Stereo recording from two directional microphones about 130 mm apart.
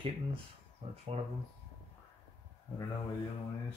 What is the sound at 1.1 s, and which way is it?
Speech, 55° right (ahead or behind).